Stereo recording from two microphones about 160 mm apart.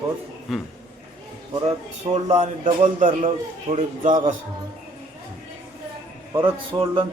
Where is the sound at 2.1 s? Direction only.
45° right (ahead or behind).